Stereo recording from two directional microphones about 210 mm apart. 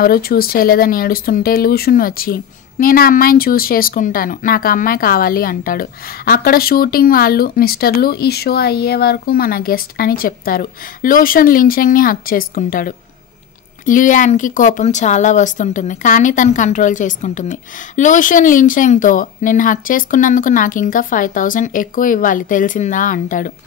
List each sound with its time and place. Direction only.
0.0 s speech: 45° left (ahead or behind)